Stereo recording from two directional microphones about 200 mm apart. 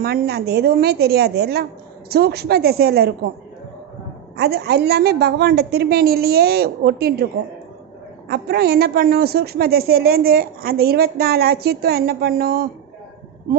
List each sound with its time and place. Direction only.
0.0 s a woman's voice: 50° right (ahead or behind)
4.4 s a woman's voice: 55° right (ahead or behind)
8.3 s a woman's voice: 55° right (ahead or behind)